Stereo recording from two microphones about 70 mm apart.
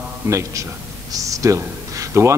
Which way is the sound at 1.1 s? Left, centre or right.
Right.